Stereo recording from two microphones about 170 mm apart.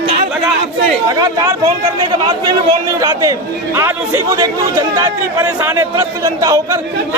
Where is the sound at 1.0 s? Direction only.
20° right (ahead or behind).